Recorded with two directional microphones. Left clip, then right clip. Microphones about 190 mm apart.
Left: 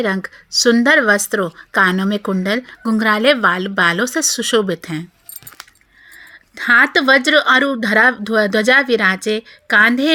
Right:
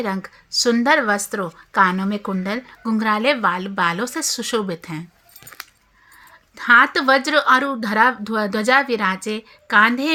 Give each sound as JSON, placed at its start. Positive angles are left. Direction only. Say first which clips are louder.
{"t": 0.0, "sound": "speech", "louder": "left 6 dB", "side_deg": 25}
{"t": 6.6, "sound": "speech", "louder": "left 2 dB", "side_deg": 25}